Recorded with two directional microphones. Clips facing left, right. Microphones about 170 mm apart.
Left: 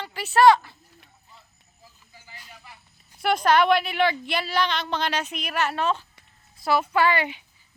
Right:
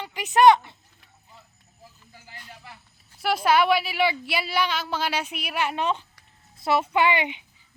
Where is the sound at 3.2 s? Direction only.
5° right (ahead or behind).